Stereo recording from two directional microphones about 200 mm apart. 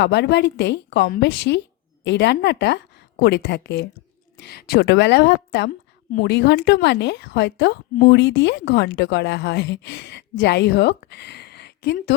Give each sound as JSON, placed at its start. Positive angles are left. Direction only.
{"t": 0.0, "sound": "a woman's voice", "side_deg": 60}